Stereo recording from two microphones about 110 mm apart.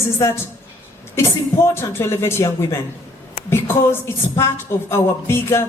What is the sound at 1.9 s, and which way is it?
Speech, 25° left (ahead or behind).